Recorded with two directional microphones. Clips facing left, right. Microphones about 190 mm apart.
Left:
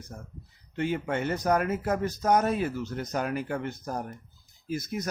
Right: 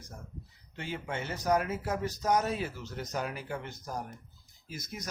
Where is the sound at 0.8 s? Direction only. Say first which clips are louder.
Left 9 dB; 55° left (ahead or behind).